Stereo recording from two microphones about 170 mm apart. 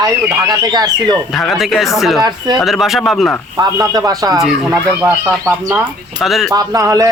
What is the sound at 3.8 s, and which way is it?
Speech, 20° right (ahead or behind).